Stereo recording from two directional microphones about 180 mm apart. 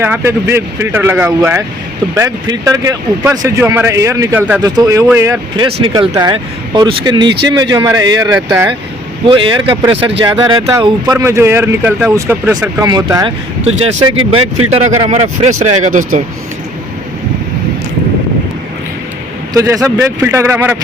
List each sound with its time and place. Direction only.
0.0 s speech: 10° right (ahead or behind)
4.6 s speech: 20° right (ahead or behind)
9.2 s speech: 30° right (ahead or behind); by 16.2 s 45° right (ahead or behind)
19.5 s speech: 15° right (ahead or behind)